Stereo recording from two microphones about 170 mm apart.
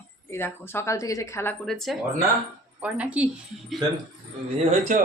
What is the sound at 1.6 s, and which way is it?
A woman's voice, centre (ahead or behind).